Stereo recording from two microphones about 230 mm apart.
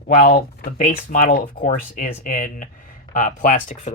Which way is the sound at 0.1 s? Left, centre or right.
Left.